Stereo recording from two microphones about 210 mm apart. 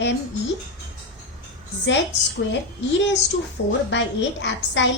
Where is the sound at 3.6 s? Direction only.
60° left (ahead or behind).